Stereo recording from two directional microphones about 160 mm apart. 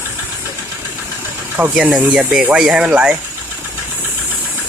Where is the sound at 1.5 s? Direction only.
10° right (ahead or behind).